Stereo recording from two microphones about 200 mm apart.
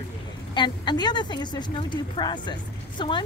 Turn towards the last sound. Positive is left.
turn(degrees=25)  # may be behind; listen again after turning